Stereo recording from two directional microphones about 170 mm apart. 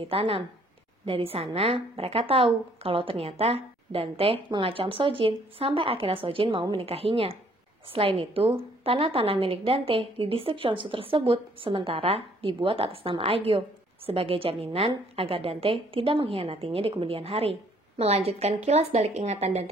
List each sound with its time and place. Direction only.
0.0 s a woman's voice: 35° right (ahead or behind)